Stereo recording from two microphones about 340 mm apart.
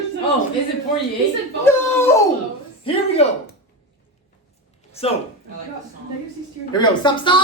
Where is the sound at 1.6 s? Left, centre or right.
Centre.